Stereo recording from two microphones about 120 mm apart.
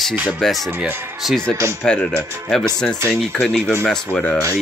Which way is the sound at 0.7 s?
15° right (ahead or behind).